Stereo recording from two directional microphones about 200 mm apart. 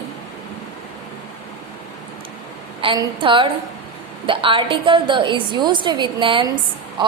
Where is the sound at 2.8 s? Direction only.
25° right (ahead or behind).